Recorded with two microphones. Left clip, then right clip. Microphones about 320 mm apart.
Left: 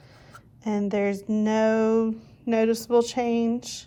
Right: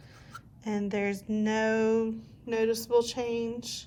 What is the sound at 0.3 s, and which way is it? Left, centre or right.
Speech, centre.